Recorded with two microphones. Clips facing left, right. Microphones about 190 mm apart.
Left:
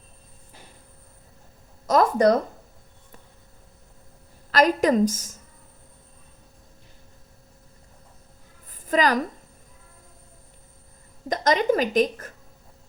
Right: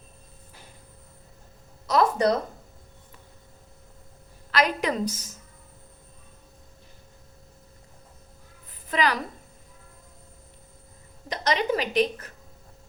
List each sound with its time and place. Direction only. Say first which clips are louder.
1.9 s a woman's voice: left 3 dB; 45° left (ahead or behind)
4.5 s a woman's voice: left 6 dB; 40° left (ahead or behind)
8.9 s a woman's voice: left 4 dB; 40° left (ahead or behind)
11.3 s a woman's voice: left 4 dB; 45° left (ahead or behind)